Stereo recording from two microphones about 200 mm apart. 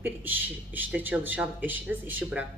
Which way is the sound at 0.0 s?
10° right (ahead or behind).